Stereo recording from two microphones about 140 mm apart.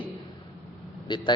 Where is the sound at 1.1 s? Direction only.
35° left (ahead or behind).